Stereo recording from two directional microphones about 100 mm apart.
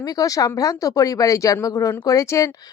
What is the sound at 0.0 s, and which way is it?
Speech, 35° left (ahead or behind).